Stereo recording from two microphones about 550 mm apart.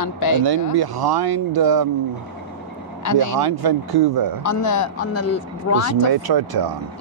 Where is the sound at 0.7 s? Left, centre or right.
Right.